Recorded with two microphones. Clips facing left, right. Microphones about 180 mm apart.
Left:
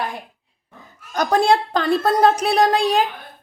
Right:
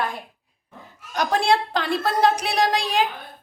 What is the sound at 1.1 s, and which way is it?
A woman's voice, 45° left (ahead or behind).